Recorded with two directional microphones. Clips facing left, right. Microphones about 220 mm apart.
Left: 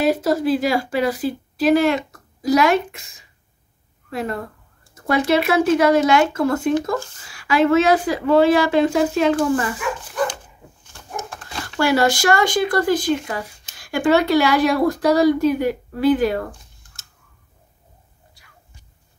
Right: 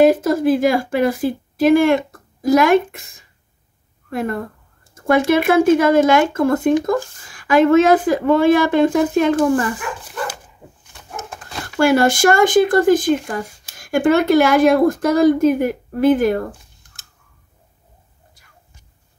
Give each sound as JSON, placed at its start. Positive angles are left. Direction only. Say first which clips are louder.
{"t": 0.0, "sound": "a woman's voice", "louder": "right 5 dB", "side_deg": -50}
{"t": 11.8, "sound": "speech", "louder": "right 4 dB", "side_deg": -50}